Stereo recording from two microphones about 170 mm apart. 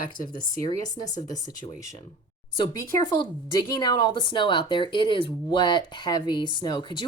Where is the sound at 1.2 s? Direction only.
25° left (ahead or behind).